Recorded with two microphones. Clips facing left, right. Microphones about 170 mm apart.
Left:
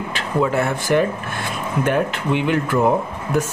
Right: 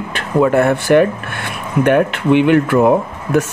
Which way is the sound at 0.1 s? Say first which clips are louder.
Right 7 dB; 55° right (ahead or behind).